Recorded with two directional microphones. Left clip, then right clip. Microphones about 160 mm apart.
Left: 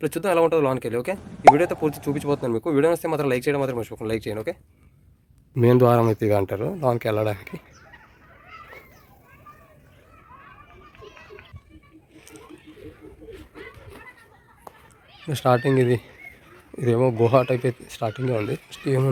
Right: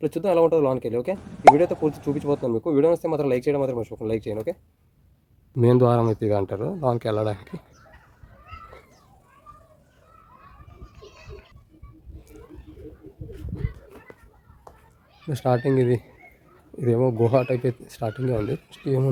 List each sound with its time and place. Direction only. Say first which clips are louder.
0.0 s speech: even; 5° right (ahead or behind)
5.5 s speech: left 2 dB; 5° right (ahead or behind)
11.0 s a sound: left 2 dB; 25° right (ahead or behind)
15.3 s speech: left 2 dB; 10° right (ahead or behind)
18.9 s speech: left 1 dB; 5° right (ahead or behind)